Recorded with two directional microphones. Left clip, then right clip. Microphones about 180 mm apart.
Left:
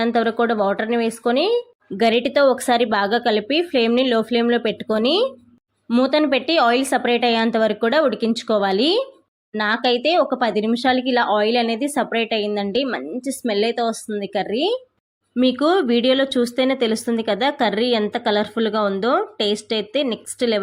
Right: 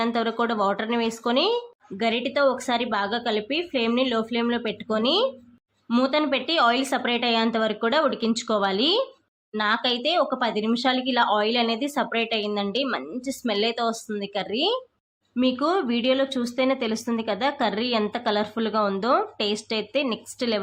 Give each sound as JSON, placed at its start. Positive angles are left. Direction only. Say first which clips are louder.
{"t": 0.0, "sound": "a woman's voice", "louder": "left 6 dB", "side_deg": 20}